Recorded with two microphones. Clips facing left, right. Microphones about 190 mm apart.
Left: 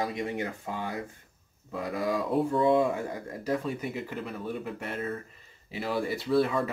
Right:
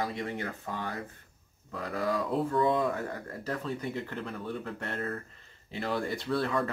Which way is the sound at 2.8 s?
10° left (ahead or behind).